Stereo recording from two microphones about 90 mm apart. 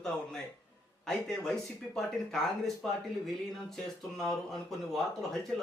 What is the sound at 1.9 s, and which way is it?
Speech, 5° left (ahead or behind).